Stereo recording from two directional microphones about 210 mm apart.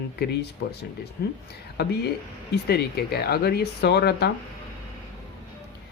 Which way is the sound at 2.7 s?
50° left (ahead or behind).